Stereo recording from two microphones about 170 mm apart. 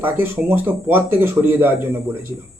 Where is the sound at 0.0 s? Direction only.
10° right (ahead or behind).